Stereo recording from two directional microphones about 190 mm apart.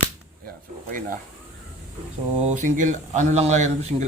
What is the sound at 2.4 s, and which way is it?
Speech, 40° right (ahead or behind).